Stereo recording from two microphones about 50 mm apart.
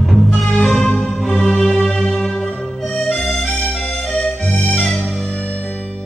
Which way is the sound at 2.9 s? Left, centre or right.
Centre.